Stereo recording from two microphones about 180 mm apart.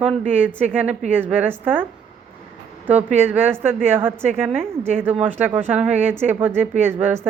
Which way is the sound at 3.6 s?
10° right (ahead or behind).